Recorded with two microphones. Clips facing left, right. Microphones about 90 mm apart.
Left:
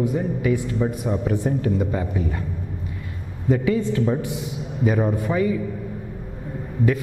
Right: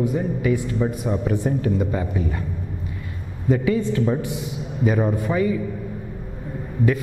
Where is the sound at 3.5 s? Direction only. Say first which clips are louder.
Even; 10° right (ahead or behind).